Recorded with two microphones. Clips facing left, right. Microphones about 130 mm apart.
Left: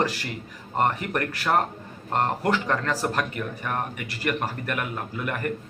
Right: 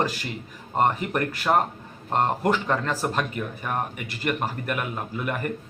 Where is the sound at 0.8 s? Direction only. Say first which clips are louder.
Right 1 dB; 5° right (ahead or behind).